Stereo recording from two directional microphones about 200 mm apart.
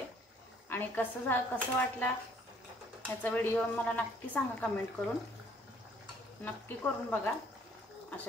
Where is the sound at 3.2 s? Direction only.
10° left (ahead or behind).